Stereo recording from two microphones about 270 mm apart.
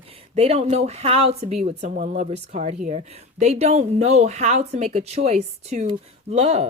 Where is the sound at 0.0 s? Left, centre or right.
Right.